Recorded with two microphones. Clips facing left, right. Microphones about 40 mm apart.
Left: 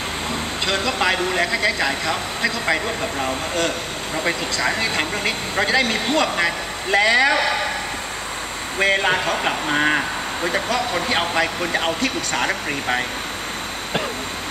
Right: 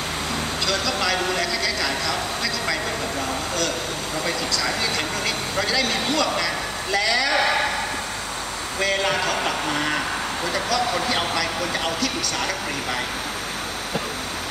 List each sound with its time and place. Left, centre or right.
0.7 s speech: left
8.7 s speech: left